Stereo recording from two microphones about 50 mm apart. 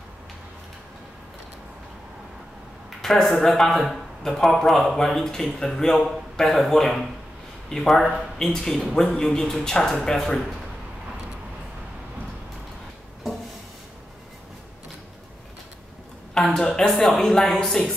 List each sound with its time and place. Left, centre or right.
3.0 s a man's voice: centre
16.3 s a woman's voice: centre
16.6 s a man's voice: centre